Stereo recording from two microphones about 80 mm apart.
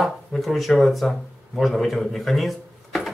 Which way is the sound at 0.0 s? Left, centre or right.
Centre.